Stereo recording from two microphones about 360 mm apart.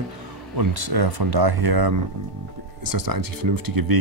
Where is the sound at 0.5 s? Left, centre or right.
Right.